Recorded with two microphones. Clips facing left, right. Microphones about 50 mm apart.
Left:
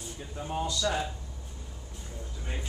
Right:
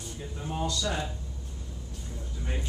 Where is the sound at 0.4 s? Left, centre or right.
Centre.